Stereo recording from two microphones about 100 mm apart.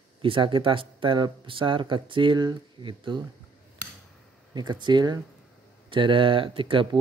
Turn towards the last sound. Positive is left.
turn(degrees=-60)  # may be behind; listen again after turning